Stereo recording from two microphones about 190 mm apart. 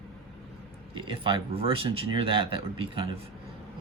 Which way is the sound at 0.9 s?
25° right (ahead or behind).